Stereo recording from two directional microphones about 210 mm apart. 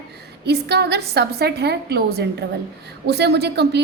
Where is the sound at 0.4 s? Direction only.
50° right (ahead or behind).